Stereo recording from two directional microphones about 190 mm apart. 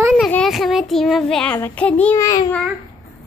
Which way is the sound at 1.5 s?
10° left (ahead or behind).